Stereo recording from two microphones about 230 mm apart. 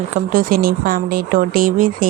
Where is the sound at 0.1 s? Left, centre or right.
Right.